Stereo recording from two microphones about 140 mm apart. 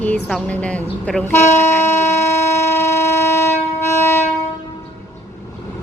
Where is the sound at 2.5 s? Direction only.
20° left (ahead or behind).